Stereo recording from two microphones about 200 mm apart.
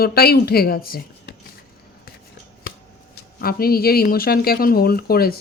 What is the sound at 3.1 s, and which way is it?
Speech, 50° left (ahead or behind).